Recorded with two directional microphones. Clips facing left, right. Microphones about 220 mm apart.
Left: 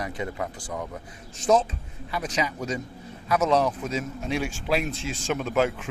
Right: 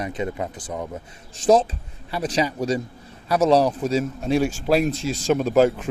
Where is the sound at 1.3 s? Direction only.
35° right (ahead or behind).